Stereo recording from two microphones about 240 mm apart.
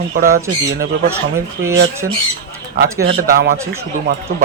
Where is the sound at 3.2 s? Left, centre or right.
Right.